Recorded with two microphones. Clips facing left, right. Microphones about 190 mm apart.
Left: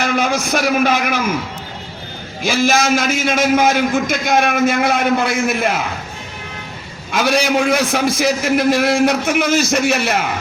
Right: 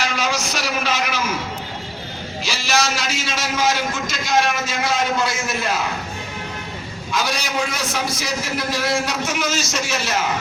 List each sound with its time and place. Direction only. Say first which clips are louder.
0.0 s a man's voice: left 6 dB; 55° left (ahead or behind)
2.4 s a man's voice: left 7 dB; 50° left (ahead or behind)
7.1 s a man's voice: left 8 dB; 55° left (ahead or behind)